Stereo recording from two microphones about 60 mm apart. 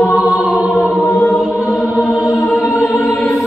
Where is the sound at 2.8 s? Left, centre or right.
Left.